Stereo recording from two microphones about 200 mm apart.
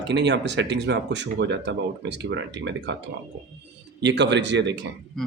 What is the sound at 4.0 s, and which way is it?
Speech, 60° right (ahead or behind).